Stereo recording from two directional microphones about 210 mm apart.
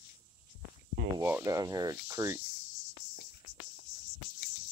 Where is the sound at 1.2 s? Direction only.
10° right (ahead or behind).